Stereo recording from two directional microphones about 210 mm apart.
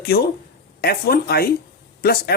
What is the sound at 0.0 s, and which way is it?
Speech, 45° left (ahead or behind).